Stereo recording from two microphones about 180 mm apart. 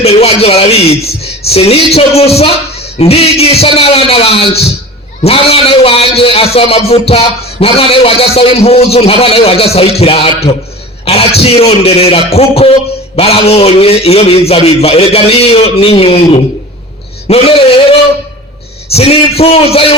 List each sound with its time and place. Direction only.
0.0 s a man's voice: 35° left (ahead or behind)
18.9 s a man's voice: 35° left (ahead or behind)